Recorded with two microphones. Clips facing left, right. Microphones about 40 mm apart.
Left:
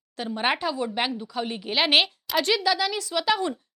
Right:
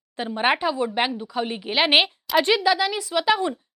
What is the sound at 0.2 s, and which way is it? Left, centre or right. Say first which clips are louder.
A woman's voice: right 4 dB; centre.